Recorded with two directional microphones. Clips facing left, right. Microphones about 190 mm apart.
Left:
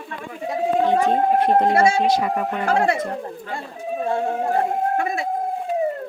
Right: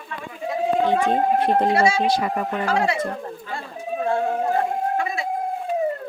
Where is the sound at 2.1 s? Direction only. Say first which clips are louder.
Left 2 dB; 35° right (ahead or behind).